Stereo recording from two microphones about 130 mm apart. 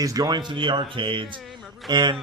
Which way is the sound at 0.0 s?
30° right (ahead or behind).